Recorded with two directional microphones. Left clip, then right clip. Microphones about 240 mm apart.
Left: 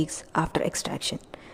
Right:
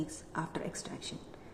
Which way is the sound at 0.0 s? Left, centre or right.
Left.